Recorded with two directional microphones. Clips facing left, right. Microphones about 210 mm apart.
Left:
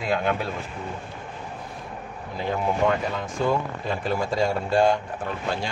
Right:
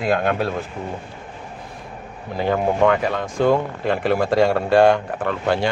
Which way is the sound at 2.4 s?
65° right (ahead or behind).